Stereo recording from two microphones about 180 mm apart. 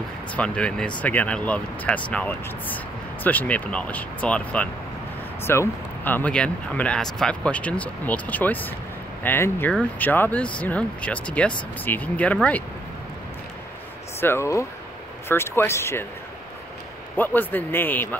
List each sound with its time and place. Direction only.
0.3 s speech: 5° left (ahead or behind)
14.2 s speech: 15° left (ahead or behind)
17.2 s speech: 10° left (ahead or behind)